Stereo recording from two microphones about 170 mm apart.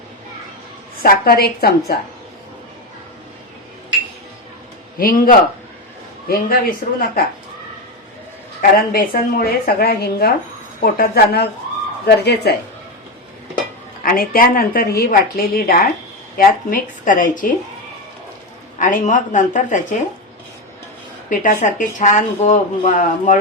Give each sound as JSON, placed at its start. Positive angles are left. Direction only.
{"t": 1.0, "sound": "a woman's voice", "side_deg": 60}
{"t": 4.9, "sound": "a woman's voice", "side_deg": 60}
{"t": 8.9, "sound": "a woman's voice", "side_deg": 60}
{"t": 14.0, "sound": "a woman's voice", "side_deg": 55}
{"t": 18.8, "sound": "speech", "side_deg": 50}
{"t": 21.2, "sound": "speech", "side_deg": 50}